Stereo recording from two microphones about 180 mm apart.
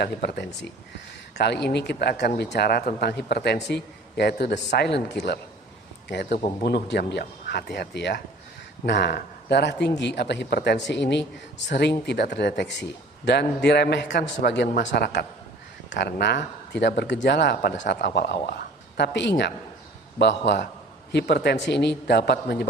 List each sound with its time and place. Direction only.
0.0 s speech: 65° left (ahead or behind)
21.1 s speech: 65° left (ahead or behind)
22.3 s speech: 60° left (ahead or behind)